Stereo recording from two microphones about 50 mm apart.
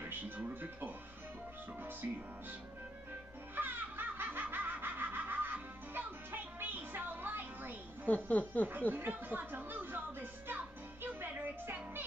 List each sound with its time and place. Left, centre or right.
0.5 s speech: right
3.5 s baby laughter: right
8.1 s speech: left
8.9 s music: right